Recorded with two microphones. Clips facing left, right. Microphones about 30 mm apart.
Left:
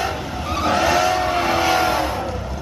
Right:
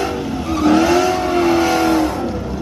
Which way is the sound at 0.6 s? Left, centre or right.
Centre.